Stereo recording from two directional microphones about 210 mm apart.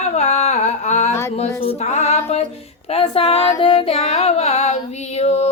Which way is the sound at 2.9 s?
25° left (ahead or behind).